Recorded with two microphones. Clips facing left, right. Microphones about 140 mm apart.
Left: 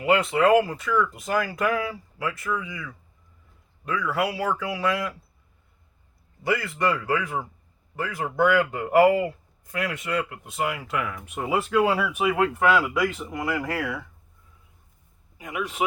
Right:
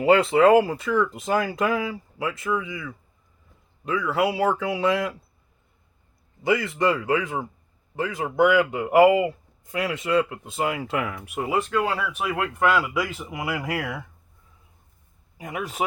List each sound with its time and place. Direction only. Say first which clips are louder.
0.0 s a man's voice: right 4 dB; 30° right (ahead or behind)
6.4 s a man's voice: right 3 dB; 20° right (ahead or behind)
11.3 s speech: left 1 dB; centre (ahead or behind)
15.4 s a man's voice: even; 35° right (ahead or behind)